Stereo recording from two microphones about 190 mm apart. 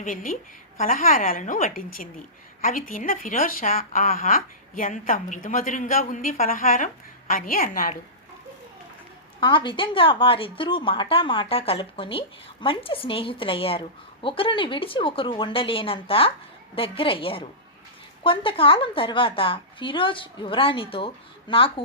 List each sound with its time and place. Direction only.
0.0 s a woman's voice: 45° left (ahead or behind)
9.4 s speech: 25° left (ahead or behind)